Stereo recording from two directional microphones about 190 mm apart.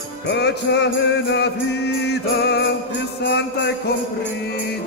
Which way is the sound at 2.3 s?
60° left (ahead or behind).